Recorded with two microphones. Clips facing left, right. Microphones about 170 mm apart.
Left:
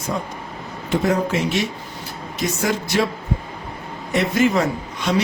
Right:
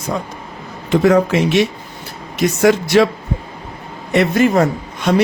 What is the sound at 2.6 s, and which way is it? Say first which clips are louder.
Speech: right 10 dB; 75° right (ahead or behind).